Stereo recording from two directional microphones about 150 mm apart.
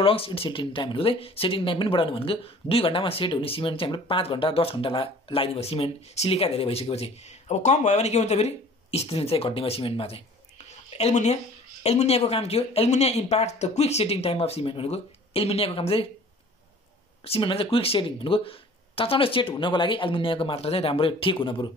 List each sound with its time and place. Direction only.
0.0 s speech: 40° left (ahead or behind)
17.2 s speech: 40° left (ahead or behind)